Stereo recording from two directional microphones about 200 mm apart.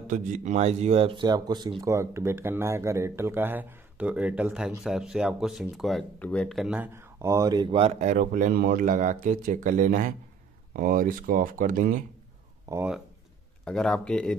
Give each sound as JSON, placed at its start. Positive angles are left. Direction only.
{"t": 0.1, "sound": "speech", "side_deg": -35}
{"t": 12.6, "sound": "speech", "side_deg": -15}
{"t": 13.7, "sound": "speech", "side_deg": 5}